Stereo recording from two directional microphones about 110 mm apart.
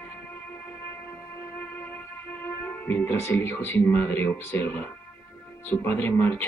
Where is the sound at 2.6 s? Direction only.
15° left (ahead or behind).